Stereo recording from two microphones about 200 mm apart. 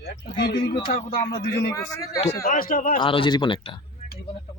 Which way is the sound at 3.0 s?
25° left (ahead or behind).